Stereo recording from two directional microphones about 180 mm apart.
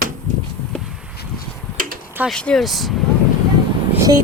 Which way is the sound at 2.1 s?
Centre (ahead or behind).